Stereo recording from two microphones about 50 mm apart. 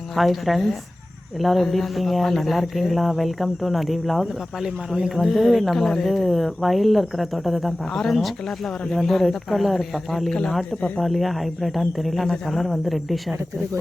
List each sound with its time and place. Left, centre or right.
0.2 s speech: centre
10.8 s speech: centre
11.0 s speech: centre